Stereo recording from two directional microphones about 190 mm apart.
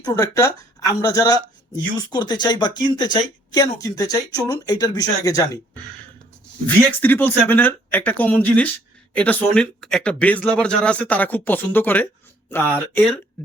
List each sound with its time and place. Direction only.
0.0 s speech: 20° left (ahead or behind)